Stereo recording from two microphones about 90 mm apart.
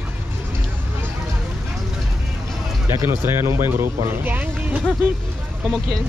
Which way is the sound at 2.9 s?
25° right (ahead or behind).